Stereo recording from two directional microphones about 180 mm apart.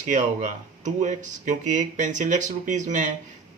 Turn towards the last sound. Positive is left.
turn(degrees=-45)  # may be behind; listen again after turning